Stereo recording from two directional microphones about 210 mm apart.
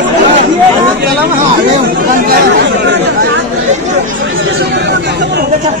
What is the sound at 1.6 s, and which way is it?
Chatter, 45° right (ahead or behind).